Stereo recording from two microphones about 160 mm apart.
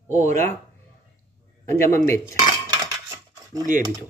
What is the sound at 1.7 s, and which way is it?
Speech, 15° left (ahead or behind).